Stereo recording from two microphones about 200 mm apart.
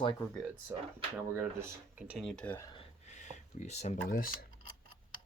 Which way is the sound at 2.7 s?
30° left (ahead or behind).